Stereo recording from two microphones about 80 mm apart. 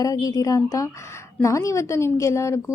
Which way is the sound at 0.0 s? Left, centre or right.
Left.